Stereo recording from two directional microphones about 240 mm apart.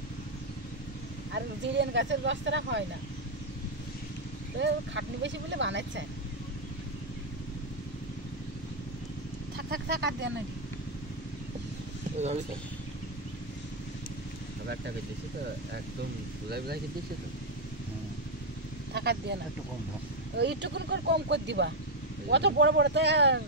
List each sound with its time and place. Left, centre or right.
1.3 s speech: right
4.6 s speech: right
9.8 s speech: right
16.4 s speech: right
18.9 s speech: right
20.3 s speech: right